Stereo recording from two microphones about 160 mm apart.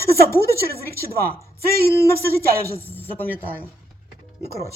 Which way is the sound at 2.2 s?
70° right (ahead or behind).